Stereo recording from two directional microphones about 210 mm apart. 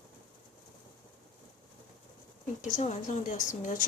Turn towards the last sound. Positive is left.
turn(degrees=35)  # may be behind; listen again after turning